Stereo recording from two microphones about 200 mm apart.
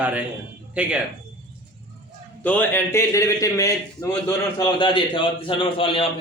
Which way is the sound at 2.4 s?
10° left (ahead or behind).